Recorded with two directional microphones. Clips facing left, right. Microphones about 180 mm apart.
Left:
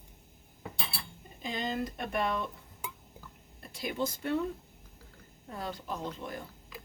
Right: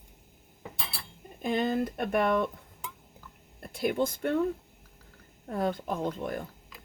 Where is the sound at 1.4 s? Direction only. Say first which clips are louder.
Right 7 dB; 60° right (ahead or behind).